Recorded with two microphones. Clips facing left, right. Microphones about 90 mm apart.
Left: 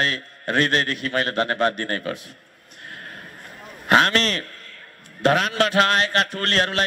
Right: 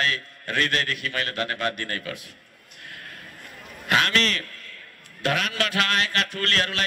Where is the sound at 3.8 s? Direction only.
35° left (ahead or behind).